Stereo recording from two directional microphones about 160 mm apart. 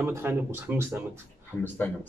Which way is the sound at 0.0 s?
15° right (ahead or behind).